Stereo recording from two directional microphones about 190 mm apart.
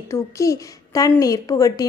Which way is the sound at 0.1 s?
15° left (ahead or behind).